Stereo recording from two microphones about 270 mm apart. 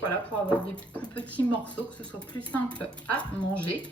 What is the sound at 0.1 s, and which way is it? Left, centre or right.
Speech, centre.